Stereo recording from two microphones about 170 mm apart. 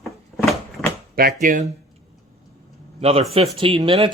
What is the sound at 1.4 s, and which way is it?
Speech, 50° right (ahead or behind).